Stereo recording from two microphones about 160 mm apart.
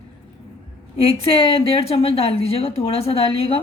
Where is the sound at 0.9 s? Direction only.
35° left (ahead or behind).